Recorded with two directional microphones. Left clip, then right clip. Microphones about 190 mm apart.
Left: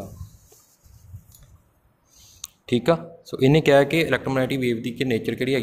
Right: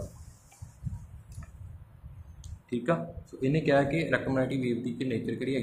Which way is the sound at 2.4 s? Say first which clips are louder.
Left 10 dB; 60° left (ahead or behind).